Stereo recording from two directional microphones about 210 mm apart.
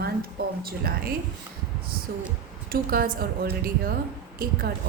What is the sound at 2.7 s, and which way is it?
A woman's voice, 45° right (ahead or behind).